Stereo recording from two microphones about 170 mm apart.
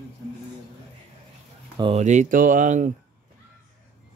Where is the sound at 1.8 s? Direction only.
35° right (ahead or behind).